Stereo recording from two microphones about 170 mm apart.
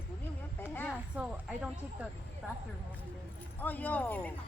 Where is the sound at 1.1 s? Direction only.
5° right (ahead or behind).